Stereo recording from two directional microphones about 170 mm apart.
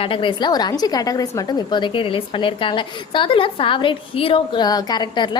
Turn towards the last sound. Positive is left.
turn(degrees=25)  # may be behind; listen again after turning